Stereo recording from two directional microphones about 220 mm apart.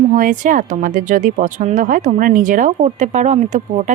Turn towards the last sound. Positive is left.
turn(degrees=-30)  # may be behind; listen again after turning